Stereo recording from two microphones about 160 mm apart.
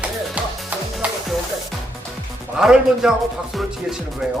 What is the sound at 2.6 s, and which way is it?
Speech, 5° right (ahead or behind).